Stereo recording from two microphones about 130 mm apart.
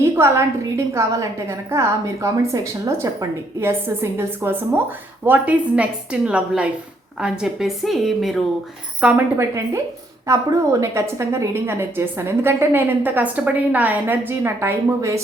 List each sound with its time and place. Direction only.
0.0 s a woman's voice: 20° right (ahead or behind)
9.4 s a woman's voice: 20° right (ahead or behind)